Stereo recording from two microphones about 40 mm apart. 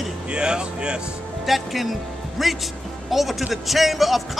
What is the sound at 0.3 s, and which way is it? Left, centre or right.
Speech, right.